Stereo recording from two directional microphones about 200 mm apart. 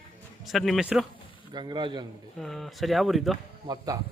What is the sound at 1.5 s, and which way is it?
Speech, 20° right (ahead or behind).